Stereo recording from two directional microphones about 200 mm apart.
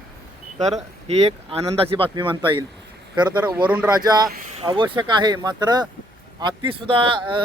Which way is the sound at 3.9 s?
20° right (ahead or behind).